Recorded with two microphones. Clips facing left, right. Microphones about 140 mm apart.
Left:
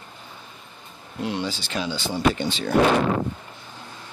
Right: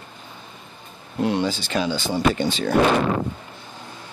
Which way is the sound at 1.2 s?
50° right (ahead or behind).